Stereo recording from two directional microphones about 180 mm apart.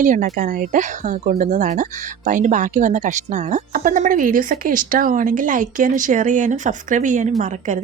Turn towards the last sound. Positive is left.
turn(degrees=-40)  # may be behind; listen again after turning